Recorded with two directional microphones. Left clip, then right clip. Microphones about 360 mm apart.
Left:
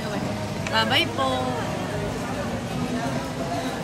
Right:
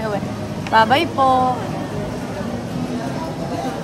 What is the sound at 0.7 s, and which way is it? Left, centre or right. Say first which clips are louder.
Speech: right 8 dB; centre.